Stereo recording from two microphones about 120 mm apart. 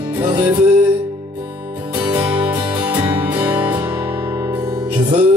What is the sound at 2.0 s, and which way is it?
Music, 10° right (ahead or behind).